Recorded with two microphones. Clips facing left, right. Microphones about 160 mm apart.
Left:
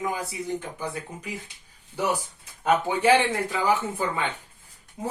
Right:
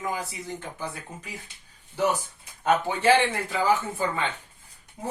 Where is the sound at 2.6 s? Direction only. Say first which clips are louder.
Left 1 dB; 15° left (ahead or behind).